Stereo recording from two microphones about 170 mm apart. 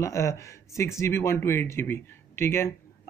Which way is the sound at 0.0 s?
15° left (ahead or behind).